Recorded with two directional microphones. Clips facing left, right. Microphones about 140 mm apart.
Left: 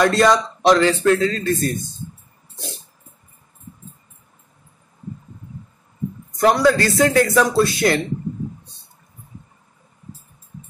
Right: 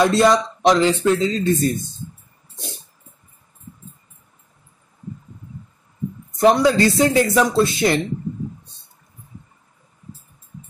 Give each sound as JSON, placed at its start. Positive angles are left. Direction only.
{"t": 0.0, "sound": "speech", "side_deg": -20}
{"t": 6.4, "sound": "speech", "side_deg": -20}